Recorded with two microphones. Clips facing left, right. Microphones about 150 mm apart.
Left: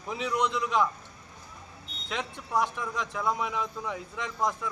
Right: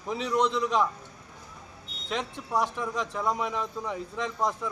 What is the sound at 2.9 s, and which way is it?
Speech, 35° right (ahead or behind).